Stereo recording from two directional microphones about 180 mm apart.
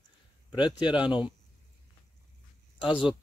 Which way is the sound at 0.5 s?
25° left (ahead or behind).